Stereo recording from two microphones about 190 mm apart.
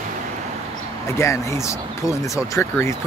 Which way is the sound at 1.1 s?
15° left (ahead or behind).